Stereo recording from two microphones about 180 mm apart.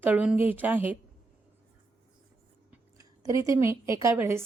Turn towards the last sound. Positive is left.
turn(degrees=-15)  # may be behind; listen again after turning